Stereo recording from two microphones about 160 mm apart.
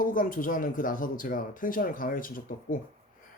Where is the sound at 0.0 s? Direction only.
60° left (ahead or behind).